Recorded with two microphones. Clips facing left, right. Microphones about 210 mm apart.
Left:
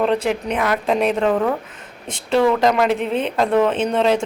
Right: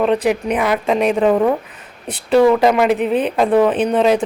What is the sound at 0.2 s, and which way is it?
A man's voice, 10° right (ahead or behind).